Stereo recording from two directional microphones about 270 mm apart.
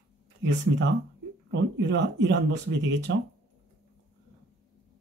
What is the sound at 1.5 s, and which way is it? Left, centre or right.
Speech, right.